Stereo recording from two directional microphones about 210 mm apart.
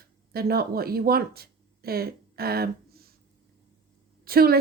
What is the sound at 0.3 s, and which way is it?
Speech, 45° right (ahead or behind).